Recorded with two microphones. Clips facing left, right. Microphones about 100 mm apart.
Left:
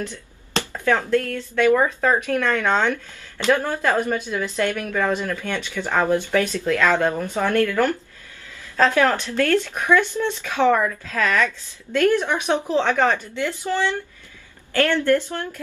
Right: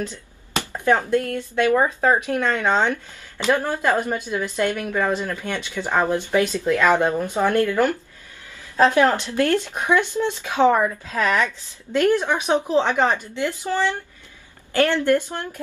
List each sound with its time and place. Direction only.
0.0 s speech: 15° right (ahead or behind)